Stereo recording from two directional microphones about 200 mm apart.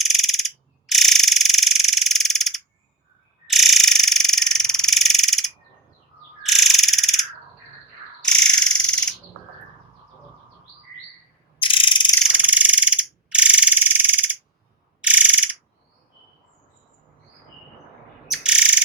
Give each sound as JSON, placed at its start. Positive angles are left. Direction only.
{"t": 0.0, "sound": "frog", "side_deg": 0}
{"t": 8.2, "sound": "a sound", "side_deg": 5}
{"t": 11.6, "sound": "ratchet", "side_deg": 25}
{"t": 12.3, "sound": "frog", "side_deg": -5}
{"t": 15.0, "sound": "a sound", "side_deg": -5}
{"t": 18.3, "sound": "bird", "side_deg": -5}